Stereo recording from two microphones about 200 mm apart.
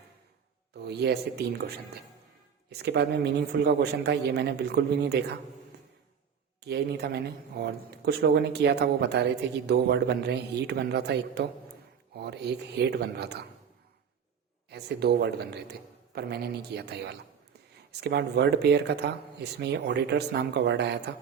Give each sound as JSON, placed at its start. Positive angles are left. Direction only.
{"t": 0.9, "sound": "speech", "side_deg": -55}
{"t": 6.7, "sound": "speech", "side_deg": -55}
{"t": 14.7, "sound": "speech", "side_deg": -55}